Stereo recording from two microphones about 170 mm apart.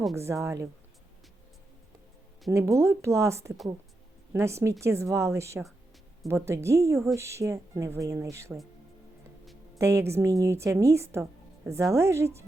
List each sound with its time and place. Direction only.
0.2 s speech: 15° right (ahead or behind)
2.5 s speech: 15° right (ahead or behind)
9.7 s speech: 15° right (ahead or behind)